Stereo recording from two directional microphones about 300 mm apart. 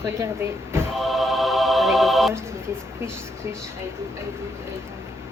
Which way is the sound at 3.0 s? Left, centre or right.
Centre.